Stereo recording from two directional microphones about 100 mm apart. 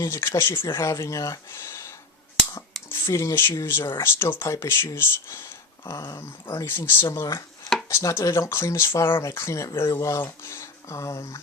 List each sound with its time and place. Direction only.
0.0 s speech: 25° left (ahead or behind)
2.9 s speech: 25° left (ahead or behind)